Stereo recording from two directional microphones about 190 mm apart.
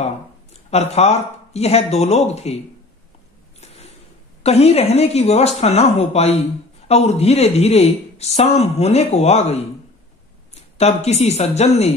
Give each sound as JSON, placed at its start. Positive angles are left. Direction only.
{"t": 0.0, "sound": "speech", "side_deg": 35}
{"t": 3.6, "sound": "a sound", "side_deg": 35}
{"t": 4.4, "sound": "a woman's voice", "side_deg": 35}